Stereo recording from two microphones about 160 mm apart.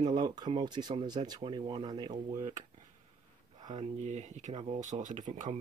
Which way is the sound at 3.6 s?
45° right (ahead or behind).